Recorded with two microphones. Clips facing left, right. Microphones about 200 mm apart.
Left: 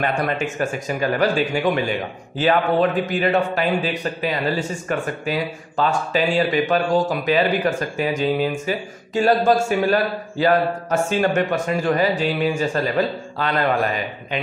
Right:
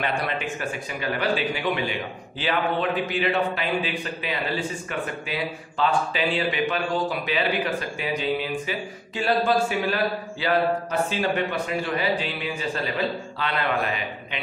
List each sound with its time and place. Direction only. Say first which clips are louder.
0.0 s speech: left 5 dB; 45° left (ahead or behind)